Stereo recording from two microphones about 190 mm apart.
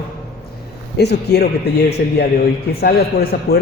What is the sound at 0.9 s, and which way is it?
A man's voice, 60° left (ahead or behind).